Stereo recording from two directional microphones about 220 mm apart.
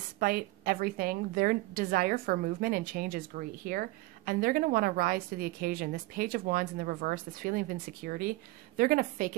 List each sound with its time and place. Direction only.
0.2 s a woman's voice: 40° right (ahead or behind)